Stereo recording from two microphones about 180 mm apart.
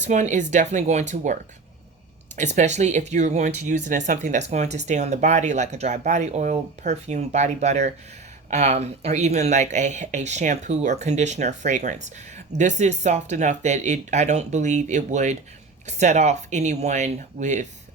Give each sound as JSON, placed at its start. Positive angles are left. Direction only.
{"t": 0.0, "sound": "speech", "side_deg": -40}